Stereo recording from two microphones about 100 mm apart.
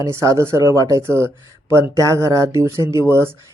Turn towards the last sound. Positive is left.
turn(degrees=-25)  # may be behind; listen again after turning